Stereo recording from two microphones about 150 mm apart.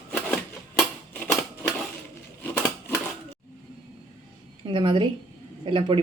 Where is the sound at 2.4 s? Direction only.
10° left (ahead or behind).